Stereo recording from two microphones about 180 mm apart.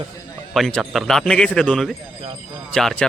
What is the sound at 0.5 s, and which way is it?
Speech, centre (ahead or behind).